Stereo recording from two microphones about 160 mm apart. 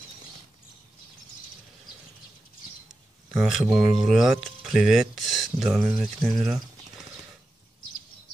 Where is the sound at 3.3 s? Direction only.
5° right (ahead or behind).